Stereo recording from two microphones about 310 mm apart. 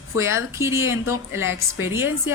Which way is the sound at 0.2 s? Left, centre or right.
Centre.